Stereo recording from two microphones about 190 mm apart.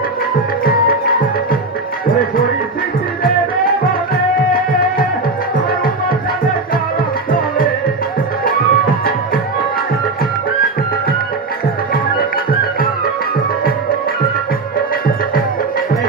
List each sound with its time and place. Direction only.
0.6 s music: 50° left (ahead or behind)
7.3 s music: 50° left (ahead or behind)